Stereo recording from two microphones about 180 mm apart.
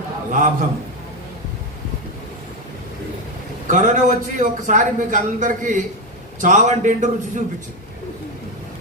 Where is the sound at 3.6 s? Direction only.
45° right (ahead or behind).